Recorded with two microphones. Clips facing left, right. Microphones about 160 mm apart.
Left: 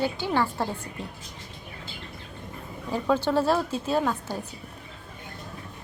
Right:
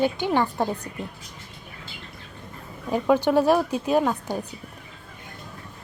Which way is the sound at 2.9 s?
15° right (ahead or behind).